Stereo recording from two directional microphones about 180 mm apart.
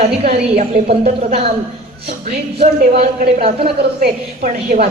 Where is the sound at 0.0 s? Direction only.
35° right (ahead or behind).